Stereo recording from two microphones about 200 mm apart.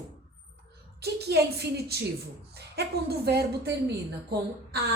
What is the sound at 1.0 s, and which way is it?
A woman's voice, 55° right (ahead or behind).